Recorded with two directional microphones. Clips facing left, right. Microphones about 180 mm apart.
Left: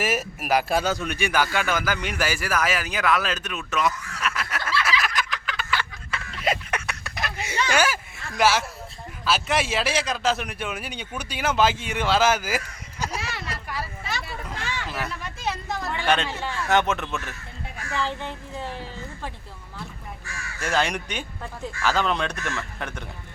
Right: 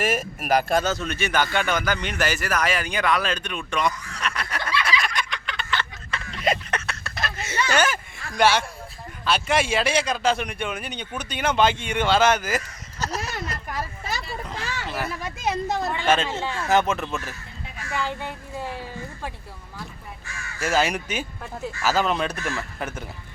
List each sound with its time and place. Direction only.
0.0 s speech: 5° left (ahead or behind)
4.8 s fowl: 5° left (ahead or behind)
7.7 s a sound: 10° left (ahead or behind)
9.2 s speech: centre (ahead or behind)
13.7 s a sound: 45° right (ahead or behind)
14.1 s a sound: centre (ahead or behind)
15.2 s speech: 20° right (ahead or behind)
16.0 s speech: 5° right (ahead or behind)
16.3 s a man's voice: 20° right (ahead or behind)
16.6 s speech: centre (ahead or behind)
17.9 s a woman's voice: 10° right (ahead or behind)
20.6 s speech: 5° right (ahead or behind)